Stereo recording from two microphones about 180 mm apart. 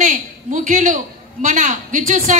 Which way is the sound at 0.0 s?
45° right (ahead or behind).